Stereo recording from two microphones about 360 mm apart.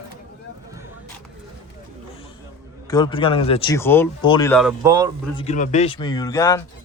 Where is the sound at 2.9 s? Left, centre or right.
Centre.